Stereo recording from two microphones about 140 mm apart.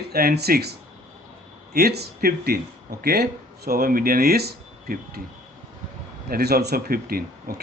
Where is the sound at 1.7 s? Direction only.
90° right.